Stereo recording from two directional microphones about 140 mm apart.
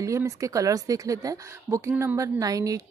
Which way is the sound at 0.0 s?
20° right (ahead or behind).